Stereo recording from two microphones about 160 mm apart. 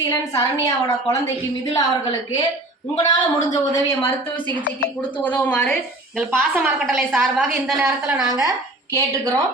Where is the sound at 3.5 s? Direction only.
20° left (ahead or behind).